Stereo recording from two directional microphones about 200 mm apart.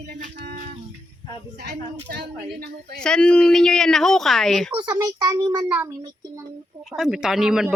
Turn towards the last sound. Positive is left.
turn(degrees=-5)  # may be behind; listen again after turning